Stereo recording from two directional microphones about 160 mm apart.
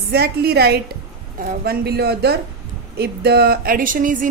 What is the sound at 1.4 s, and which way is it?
A woman's voice, 70° right (ahead or behind).